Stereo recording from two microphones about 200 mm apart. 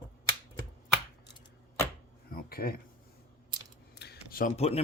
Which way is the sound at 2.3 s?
50° left (ahead or behind).